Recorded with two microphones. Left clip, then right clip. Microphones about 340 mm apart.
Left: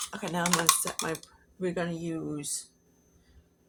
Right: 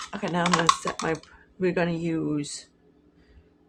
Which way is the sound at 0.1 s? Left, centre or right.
Left.